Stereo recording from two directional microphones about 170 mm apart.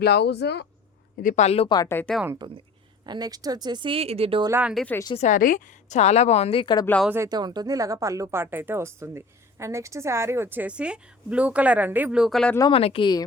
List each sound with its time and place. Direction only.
0.0 s speech: 75° left (ahead or behind)
1.1 s a woman's voice: 50° left (ahead or behind); by 1.8 s 35° left (ahead or behind)
1.8 s speech: 15° left (ahead or behind)
2.2 s speech: 20° right (ahead or behind); by 4.4 s 35° right (ahead or behind)
4.4 s speech: 15° right (ahead or behind)
4.7 s speech: centre (ahead or behind)
5.1 s a woman's voice: 45° left (ahead or behind); by 6.8 s 30° left (ahead or behind)
7.1 s speech: 20° right (ahead or behind); by 12.5 s centre (ahead or behind)
12.7 s a woman's voice: 35° left (ahead or behind)